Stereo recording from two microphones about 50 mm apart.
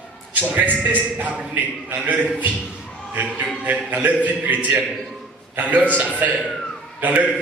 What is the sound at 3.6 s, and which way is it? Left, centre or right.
A man's voice, right.